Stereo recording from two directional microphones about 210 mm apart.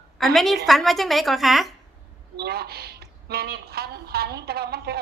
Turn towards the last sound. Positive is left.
turn(degrees=-50)  # may be behind; listen again after turning